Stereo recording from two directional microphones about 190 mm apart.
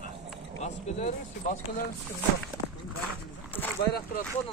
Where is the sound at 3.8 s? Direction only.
55° left (ahead or behind).